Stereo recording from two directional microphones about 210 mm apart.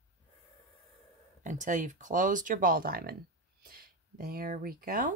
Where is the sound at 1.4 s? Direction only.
35° right (ahead or behind).